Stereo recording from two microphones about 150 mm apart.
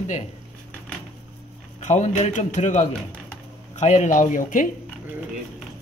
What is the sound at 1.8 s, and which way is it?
Speech, 55° left (ahead or behind).